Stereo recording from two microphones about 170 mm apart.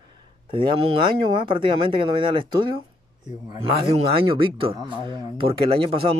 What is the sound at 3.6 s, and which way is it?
Speech, 35° right (ahead or behind).